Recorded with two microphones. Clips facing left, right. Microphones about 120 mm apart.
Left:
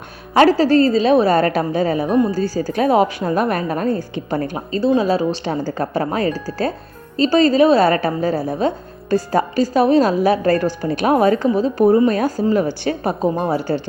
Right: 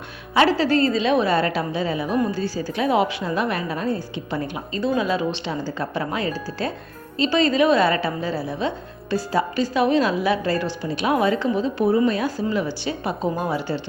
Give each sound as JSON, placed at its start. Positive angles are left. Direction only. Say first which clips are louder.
{"t": 0.3, "sound": "a woman's voice", "louder": "left 6 dB", "side_deg": 40}